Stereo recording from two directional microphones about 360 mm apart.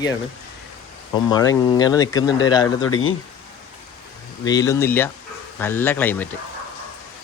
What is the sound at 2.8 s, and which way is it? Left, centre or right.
Speech, left.